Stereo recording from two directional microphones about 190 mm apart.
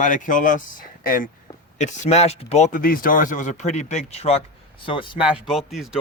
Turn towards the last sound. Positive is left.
turn(degrees=0)  # may be behind; listen again after turning